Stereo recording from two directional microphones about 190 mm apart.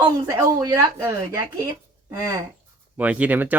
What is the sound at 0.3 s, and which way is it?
Speech, 20° right (ahead or behind).